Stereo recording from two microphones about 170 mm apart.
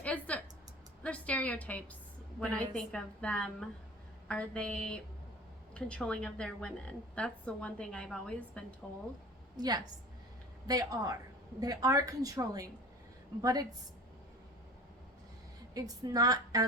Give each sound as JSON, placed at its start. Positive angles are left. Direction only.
{"t": 0.0, "sound": "a sound", "side_deg": 10}
{"t": 1.0, "sound": "a woman's voice", "side_deg": 10}
{"t": 9.6, "sound": "a woman's voice", "side_deg": -25}
{"t": 15.7, "sound": "a woman's voice", "side_deg": -20}